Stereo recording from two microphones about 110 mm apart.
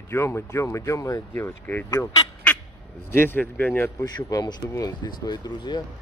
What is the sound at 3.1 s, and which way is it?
Speech, 20° left (ahead or behind).